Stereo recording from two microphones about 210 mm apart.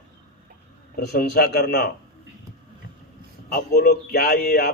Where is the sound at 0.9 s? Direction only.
50° left (ahead or behind).